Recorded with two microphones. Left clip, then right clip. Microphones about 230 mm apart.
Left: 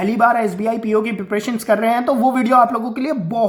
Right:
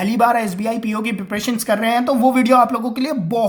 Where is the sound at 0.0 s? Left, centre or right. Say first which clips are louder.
Left 1 dB; right.